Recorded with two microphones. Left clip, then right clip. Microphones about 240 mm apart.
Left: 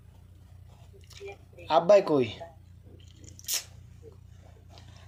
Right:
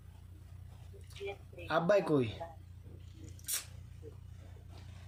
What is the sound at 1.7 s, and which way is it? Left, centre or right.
Speech, centre.